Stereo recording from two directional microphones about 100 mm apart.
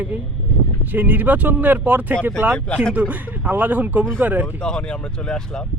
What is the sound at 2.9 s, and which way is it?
Speech, 15° right (ahead or behind).